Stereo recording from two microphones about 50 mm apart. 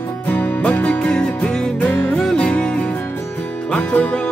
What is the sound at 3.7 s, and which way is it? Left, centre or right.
Music, left.